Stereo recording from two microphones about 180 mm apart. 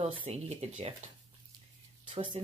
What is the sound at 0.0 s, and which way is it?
Speech, 30° right (ahead or behind).